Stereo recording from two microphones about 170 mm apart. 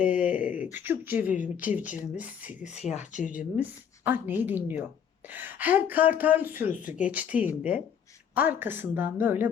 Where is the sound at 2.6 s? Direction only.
40° left (ahead or behind).